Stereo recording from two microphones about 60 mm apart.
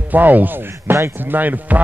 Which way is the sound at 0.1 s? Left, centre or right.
Right.